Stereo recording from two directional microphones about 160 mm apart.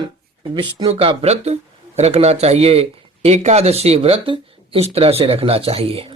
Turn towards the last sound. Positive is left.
turn(degrees=-35)  # may be behind; listen again after turning